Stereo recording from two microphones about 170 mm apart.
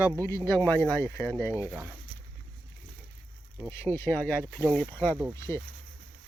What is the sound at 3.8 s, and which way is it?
Speech, 15° left (ahead or behind).